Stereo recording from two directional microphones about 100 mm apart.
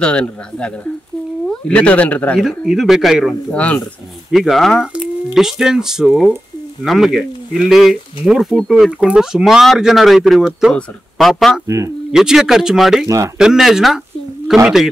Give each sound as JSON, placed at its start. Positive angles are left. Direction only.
{"t": 0.0, "sound": "speech", "side_deg": 10}
{"t": 2.4, "sound": "speech", "side_deg": -5}
{"t": 3.5, "sound": "speech", "side_deg": 15}
{"t": 4.3, "sound": "speech", "side_deg": 0}
{"t": 11.6, "sound": "speech", "side_deg": -35}
{"t": 12.1, "sound": "speech", "side_deg": -5}
{"t": 13.0, "sound": "speech", "side_deg": -30}
{"t": 13.4, "sound": "speech", "side_deg": -5}